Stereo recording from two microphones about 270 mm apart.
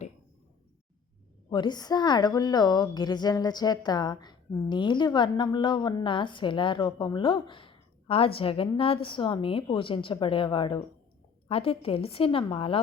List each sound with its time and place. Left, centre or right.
1.5 s a woman's voice: centre